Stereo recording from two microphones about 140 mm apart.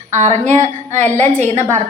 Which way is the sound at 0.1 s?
55° right (ahead or behind).